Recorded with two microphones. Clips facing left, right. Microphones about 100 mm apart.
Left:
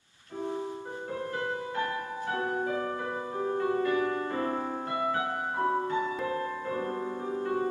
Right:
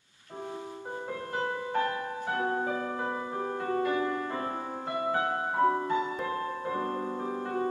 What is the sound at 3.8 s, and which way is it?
Music, 25° right (ahead or behind).